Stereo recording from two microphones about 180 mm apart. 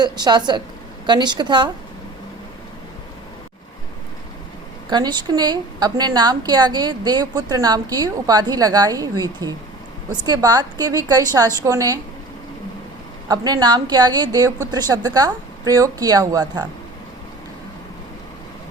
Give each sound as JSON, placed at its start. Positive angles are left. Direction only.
{"t": 0.0, "sound": "a woman's voice", "side_deg": -25}
{"t": 4.9, "sound": "a woman's voice", "side_deg": -25}
{"t": 13.2, "sound": "a woman's voice", "side_deg": -20}